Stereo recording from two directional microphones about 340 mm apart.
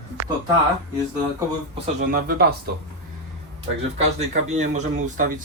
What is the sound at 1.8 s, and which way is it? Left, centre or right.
Speech, right.